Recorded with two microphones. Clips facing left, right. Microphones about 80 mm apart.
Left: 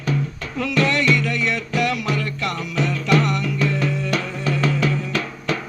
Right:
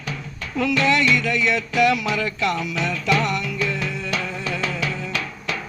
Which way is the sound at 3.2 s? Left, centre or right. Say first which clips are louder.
Left 2 dB; right.